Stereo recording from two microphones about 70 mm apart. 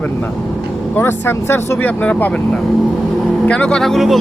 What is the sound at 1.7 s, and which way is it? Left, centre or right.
Speech, left.